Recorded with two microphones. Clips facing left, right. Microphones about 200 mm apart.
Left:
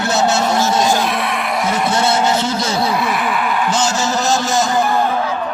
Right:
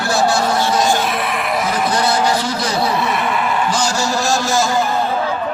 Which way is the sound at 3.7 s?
20° left (ahead or behind).